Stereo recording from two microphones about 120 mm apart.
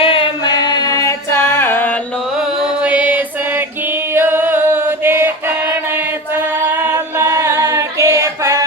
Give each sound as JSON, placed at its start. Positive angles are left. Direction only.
{"t": 0.0, "sound": "singing", "side_deg": 50}
{"t": 2.4, "sound": "chant", "side_deg": -10}
{"t": 6.3, "sound": "a capella", "side_deg": -20}